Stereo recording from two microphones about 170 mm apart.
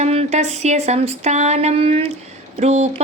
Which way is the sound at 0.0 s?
40° right (ahead or behind).